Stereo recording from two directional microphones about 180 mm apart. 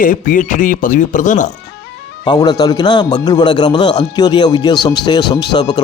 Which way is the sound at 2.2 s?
20° left (ahead or behind).